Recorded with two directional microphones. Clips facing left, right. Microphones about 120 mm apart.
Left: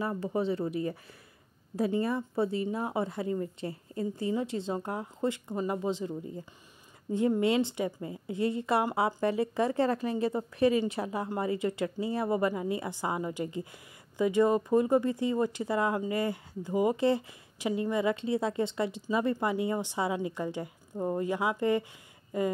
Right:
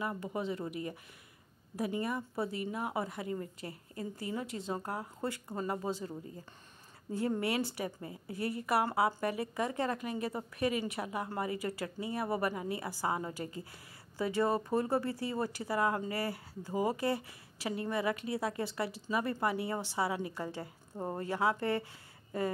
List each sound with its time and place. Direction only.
0.0 s a woman's voice: 30° left (ahead or behind)